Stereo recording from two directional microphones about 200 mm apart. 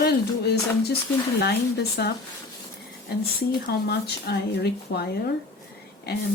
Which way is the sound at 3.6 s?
50° left (ahead or behind).